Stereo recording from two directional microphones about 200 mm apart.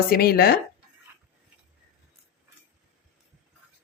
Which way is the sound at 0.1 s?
50° left (ahead or behind).